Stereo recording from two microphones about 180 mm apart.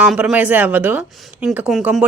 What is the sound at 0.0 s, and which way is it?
Speech, 5° right (ahead or behind).